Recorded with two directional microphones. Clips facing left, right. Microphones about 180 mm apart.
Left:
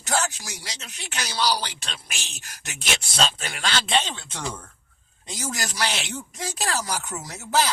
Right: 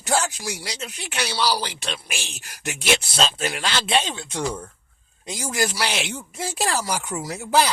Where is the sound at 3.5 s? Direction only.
5° right (ahead or behind).